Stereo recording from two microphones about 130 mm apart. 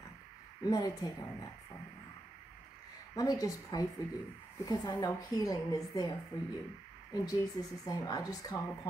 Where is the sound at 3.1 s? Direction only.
25° left (ahead or behind).